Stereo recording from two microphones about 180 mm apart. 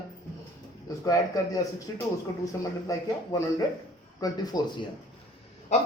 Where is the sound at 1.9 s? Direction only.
20° left (ahead or behind).